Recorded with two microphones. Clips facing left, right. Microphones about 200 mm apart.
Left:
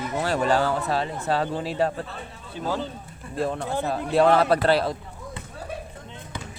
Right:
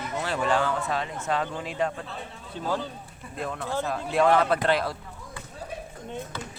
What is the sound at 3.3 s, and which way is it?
Speech, 30° left (ahead or behind).